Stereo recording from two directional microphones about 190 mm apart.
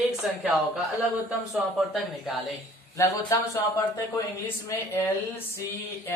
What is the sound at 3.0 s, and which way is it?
Speech, 15° left (ahead or behind).